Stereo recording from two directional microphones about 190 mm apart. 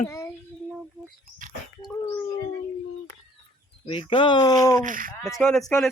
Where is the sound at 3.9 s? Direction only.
30° left (ahead or behind).